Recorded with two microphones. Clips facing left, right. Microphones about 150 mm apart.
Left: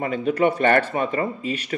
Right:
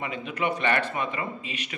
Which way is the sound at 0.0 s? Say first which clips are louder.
Left 9 dB; 45° left (ahead or behind).